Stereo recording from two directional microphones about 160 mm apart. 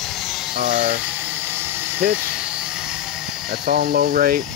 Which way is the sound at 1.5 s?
15° right (ahead or behind).